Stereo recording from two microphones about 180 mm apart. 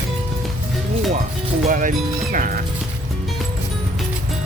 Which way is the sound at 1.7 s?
45° right (ahead or behind).